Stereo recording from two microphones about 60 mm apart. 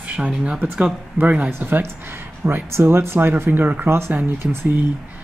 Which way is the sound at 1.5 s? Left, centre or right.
Right.